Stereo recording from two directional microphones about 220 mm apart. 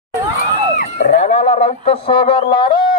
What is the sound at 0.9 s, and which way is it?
Speech, 30° left (ahead or behind).